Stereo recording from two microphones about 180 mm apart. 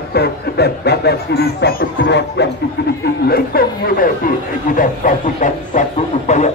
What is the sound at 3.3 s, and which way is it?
Speech, 55° left (ahead or behind).